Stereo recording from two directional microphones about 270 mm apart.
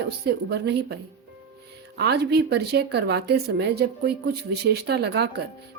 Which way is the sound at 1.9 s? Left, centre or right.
Right.